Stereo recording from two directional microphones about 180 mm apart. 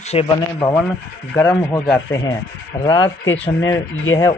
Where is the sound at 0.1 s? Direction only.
35° left (ahead or behind).